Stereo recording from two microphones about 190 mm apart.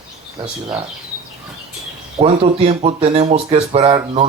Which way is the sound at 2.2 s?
30° right (ahead or behind).